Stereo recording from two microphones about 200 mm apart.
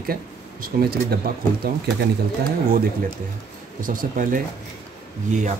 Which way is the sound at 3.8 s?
45° right (ahead or behind).